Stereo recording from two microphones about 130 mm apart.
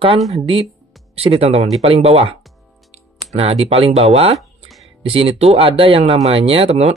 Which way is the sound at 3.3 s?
50° right (ahead or behind).